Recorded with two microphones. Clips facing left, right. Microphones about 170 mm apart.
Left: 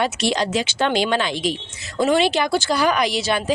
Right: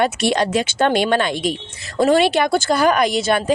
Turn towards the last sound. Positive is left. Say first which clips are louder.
# right 4 dB
turn(degrees=-50)  # may be behind; listen again after turning